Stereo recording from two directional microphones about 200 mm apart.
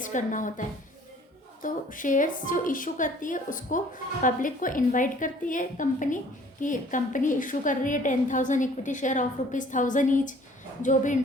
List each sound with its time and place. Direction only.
0.0 s a woman's voice: 40° left (ahead or behind)
1.6 s a woman's voice: 40° left (ahead or behind)